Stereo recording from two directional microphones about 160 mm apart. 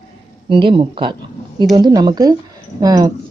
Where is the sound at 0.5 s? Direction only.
30° right (ahead or behind).